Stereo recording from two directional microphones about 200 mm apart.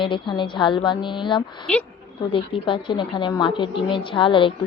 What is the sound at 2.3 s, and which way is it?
A woman's voice, 25° left (ahead or behind).